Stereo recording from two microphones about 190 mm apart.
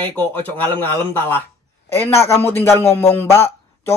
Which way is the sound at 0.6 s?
10° left (ahead or behind).